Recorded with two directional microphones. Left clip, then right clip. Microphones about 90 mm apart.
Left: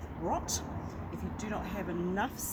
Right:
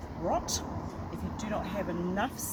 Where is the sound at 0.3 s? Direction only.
35° right (ahead or behind).